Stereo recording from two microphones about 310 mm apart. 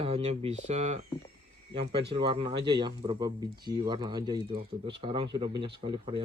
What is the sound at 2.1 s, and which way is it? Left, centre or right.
Speech, centre.